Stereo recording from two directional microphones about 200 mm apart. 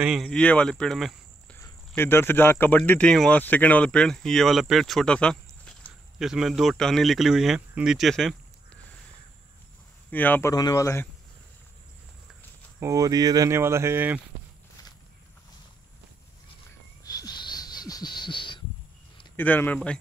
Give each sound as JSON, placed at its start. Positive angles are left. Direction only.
{"t": 0.0, "sound": "speech", "side_deg": 0}
{"t": 10.1, "sound": "speech", "side_deg": 10}
{"t": 12.8, "sound": "speech", "side_deg": -15}
{"t": 17.0, "sound": "a sound", "side_deg": 20}
{"t": 19.3, "sound": "speech", "side_deg": 10}